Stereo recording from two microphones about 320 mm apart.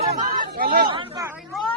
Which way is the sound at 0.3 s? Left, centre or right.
Right.